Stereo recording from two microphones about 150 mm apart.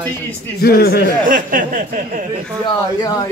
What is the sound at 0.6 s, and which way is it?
Speech, 90° left.